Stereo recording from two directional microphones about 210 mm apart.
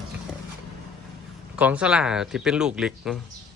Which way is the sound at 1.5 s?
5° right (ahead or behind).